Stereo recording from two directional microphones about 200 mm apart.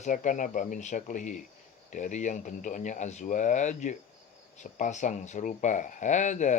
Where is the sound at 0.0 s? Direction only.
40° left (ahead or behind).